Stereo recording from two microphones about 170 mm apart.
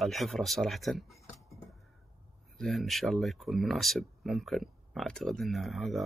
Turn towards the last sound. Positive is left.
turn(degrees=0)  # may be behind; listen again after turning